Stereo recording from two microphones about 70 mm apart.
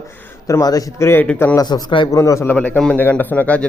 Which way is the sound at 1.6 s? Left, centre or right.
Left.